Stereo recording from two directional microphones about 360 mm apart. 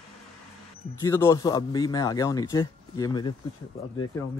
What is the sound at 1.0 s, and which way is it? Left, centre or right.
Speech, centre.